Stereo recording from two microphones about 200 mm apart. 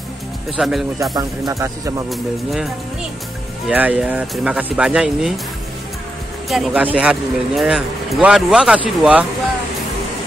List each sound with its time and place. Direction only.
0.6 s speech: centre (ahead or behind)
1.1 s speech: 15° right (ahead or behind)
2.0 s speech: centre (ahead or behind)
6.5 s speech: centre (ahead or behind)